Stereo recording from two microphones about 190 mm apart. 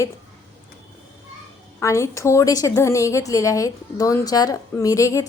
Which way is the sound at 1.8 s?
15° left (ahead or behind).